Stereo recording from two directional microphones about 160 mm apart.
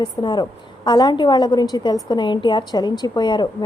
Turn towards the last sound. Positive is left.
turn(degrees=30)  # may be behind; listen again after turning